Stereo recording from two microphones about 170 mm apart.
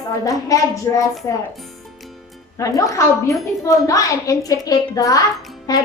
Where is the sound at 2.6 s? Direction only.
20° left (ahead or behind).